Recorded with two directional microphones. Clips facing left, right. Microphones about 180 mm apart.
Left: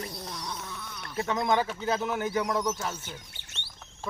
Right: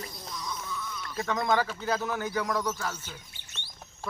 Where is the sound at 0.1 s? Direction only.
65° left (ahead or behind).